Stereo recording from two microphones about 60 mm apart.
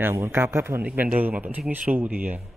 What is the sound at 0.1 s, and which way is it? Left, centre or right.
Speech, right.